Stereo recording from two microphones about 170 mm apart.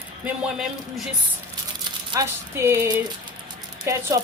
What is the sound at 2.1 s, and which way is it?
Music, 15° right (ahead or behind).